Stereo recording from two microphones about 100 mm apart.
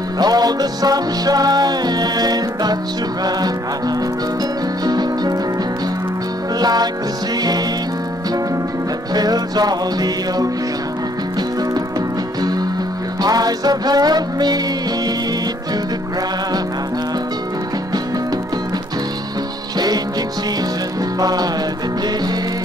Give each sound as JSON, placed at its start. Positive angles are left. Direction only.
{"t": 0.2, "sound": "music", "side_deg": -40}
{"t": 4.8, "sound": "music", "side_deg": -40}
{"t": 6.6, "sound": "music", "side_deg": -40}
{"t": 9.1, "sound": "music", "side_deg": -40}
{"t": 13.2, "sound": "music", "side_deg": -40}
{"t": 21.2, "sound": "music", "side_deg": -40}